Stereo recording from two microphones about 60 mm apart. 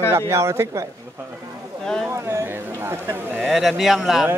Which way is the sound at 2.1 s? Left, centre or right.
Right.